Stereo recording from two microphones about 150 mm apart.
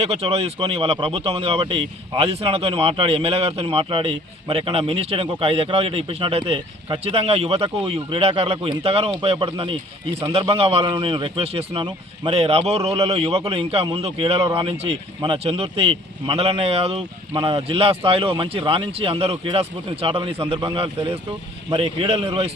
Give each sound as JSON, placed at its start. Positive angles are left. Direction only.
{"t": 0.0, "sound": "speech", "side_deg": -40}